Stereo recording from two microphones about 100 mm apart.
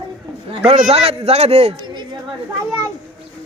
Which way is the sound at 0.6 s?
85° right.